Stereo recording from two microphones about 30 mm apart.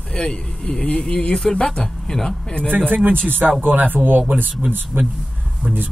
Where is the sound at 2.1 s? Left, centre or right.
Left.